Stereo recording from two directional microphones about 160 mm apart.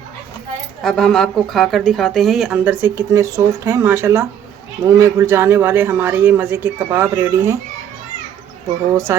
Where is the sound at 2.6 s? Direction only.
15° right (ahead or behind).